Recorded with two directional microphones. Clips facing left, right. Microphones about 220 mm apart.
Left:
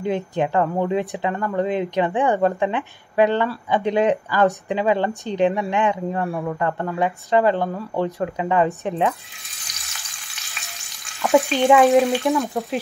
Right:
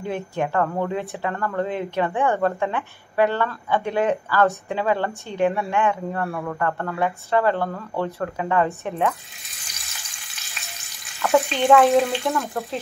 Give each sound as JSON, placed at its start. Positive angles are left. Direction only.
{"t": 0.0, "sound": "speech", "side_deg": 20}
{"t": 11.3, "sound": "speech", "side_deg": 15}